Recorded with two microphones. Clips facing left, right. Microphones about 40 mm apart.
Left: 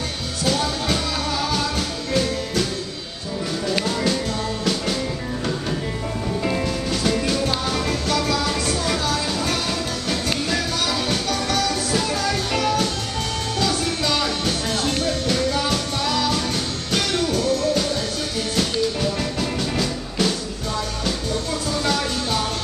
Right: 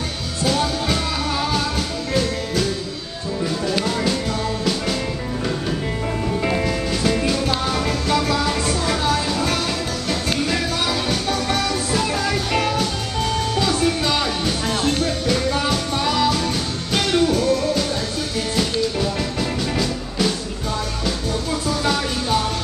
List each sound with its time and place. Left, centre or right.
0.5 s music: centre
2.1 s music: centre
3.8 s music: centre
6.4 s music: centre
11.2 s music: centre
21.6 s music: centre